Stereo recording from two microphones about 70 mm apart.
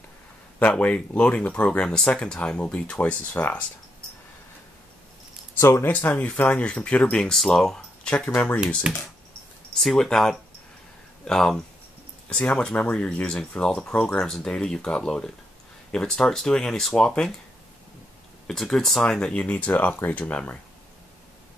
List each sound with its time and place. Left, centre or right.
0.6 s speech: left
3.3 s speech: left
5.6 s speech: left
5.9 s speech: left
9.8 s speech: centre
18.5 s speech: centre